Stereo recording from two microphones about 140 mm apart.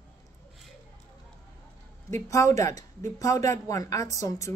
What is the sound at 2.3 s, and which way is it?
A woman's voice, 20° left (ahead or behind).